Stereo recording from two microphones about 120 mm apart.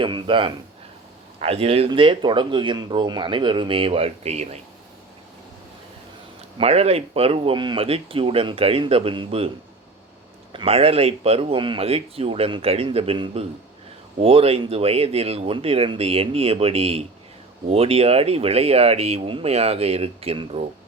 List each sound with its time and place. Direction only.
0.0 s speech: 45° right (ahead or behind)
1.4 s speech: 55° right (ahead or behind)
1.9 s speech: 45° right (ahead or behind); by 4.6 s 65° right (ahead or behind)
6.6 s speech: 60° right (ahead or behind)
10.5 s speech: 50° right (ahead or behind)